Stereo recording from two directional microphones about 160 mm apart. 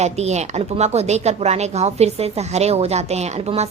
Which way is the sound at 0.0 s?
45° right (ahead or behind).